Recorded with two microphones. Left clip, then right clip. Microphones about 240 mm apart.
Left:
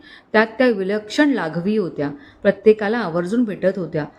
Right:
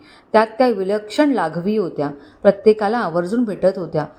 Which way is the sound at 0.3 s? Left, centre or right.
Centre.